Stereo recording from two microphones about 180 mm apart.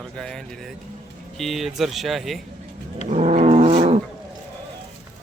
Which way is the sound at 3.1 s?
35° right (ahead or behind).